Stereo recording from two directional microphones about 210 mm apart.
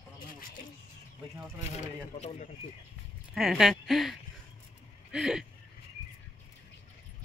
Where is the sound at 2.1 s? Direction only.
30° left (ahead or behind).